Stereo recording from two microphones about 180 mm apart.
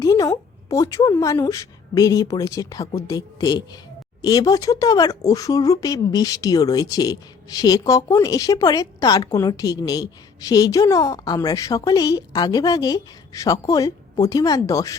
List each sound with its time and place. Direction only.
0.0 s speech: 20° left (ahead or behind)